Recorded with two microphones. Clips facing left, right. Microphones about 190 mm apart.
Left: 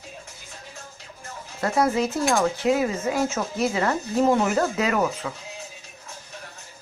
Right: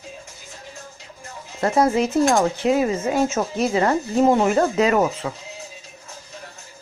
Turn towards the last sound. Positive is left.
turn(degrees=-25)  # may be behind; listen again after turning